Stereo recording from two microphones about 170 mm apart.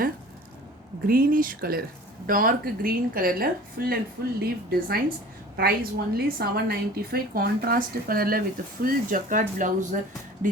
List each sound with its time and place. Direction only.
1.0 s a woman's voice: 55° right (ahead or behind)